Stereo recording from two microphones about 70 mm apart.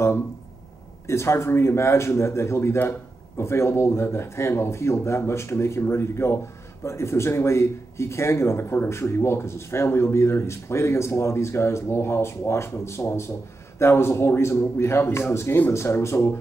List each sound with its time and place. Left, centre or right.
1.0 s speech: left